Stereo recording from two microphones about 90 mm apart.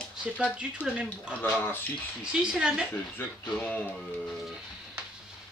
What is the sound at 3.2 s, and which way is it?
Speech, 20° left (ahead or behind).